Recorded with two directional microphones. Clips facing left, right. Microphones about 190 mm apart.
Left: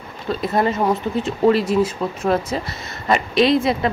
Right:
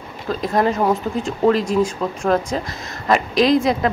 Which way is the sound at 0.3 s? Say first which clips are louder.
Right 1 dB; 5° left (ahead or behind).